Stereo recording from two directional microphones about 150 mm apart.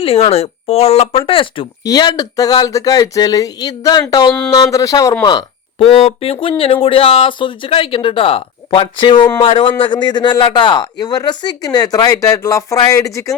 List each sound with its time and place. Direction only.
0.0 s speech: 40° left (ahead or behind)
1.8 s speech: 25° left (ahead or behind)